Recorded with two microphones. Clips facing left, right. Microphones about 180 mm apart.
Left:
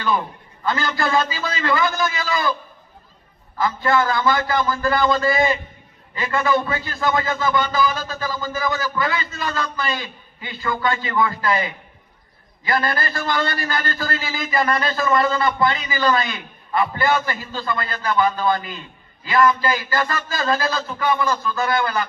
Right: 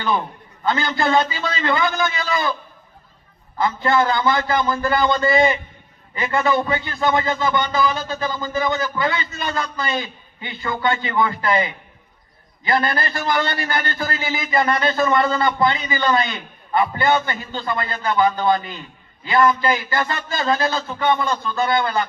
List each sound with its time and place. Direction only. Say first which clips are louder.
0.6 s a man's voice: right 2 dB; 25° right (ahead or behind)
3.6 s a man's voice: right 1 dB; 20° right (ahead or behind)